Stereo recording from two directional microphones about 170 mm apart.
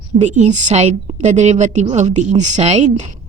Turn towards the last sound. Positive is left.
turn(degrees=-45)  # may be behind; listen again after turning